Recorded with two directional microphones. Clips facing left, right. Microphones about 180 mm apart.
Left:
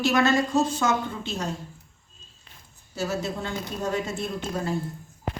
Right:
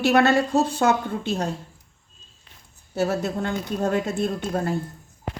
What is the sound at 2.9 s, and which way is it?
A woman's voice, 60° right (ahead or behind).